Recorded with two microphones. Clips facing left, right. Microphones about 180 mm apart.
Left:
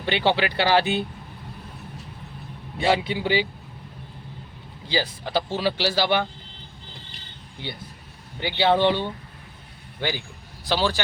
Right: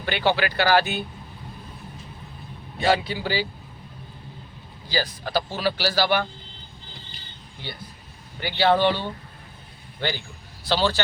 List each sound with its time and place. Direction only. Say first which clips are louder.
0.0 s speech: left 1 dB; 25° left (ahead or behind)
2.7 s speech: even; 25° left (ahead or behind)
4.9 s speech: left 1 dB; 20° left (ahead or behind)
8.4 s a man's voice: even; 20° left (ahead or behind)